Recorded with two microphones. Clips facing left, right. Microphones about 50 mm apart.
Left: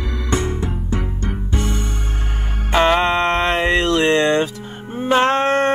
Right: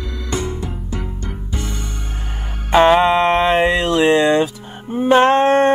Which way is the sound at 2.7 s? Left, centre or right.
Centre.